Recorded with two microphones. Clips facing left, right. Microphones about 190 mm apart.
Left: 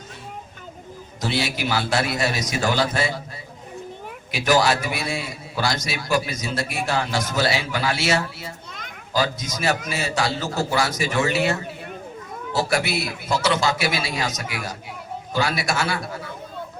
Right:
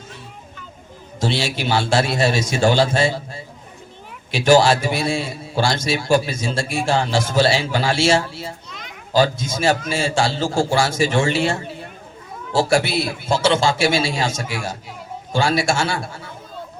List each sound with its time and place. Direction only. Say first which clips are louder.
1.2 s a man's voice: right 3 dB; 30° right (ahead or behind)
4.3 s a man's voice: right 5 dB; 30° right (ahead or behind)
8.6 s children playing: right 1 dB; 50° left (ahead or behind)
9.1 s a man's voice: right 6 dB; 30° right (ahead or behind)